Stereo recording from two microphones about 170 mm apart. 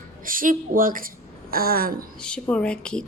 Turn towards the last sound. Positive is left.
turn(degrees=5)  # may be behind; listen again after turning